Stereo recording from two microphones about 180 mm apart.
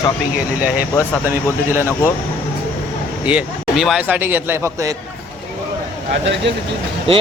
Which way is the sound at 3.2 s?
5° right (ahead or behind).